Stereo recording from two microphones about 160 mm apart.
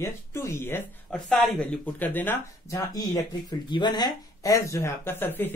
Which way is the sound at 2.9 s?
25° left (ahead or behind).